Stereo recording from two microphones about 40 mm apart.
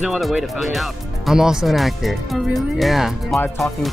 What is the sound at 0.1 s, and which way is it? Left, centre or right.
Speech, centre.